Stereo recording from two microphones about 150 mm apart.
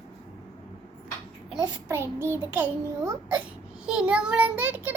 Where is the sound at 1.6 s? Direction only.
20° right (ahead or behind).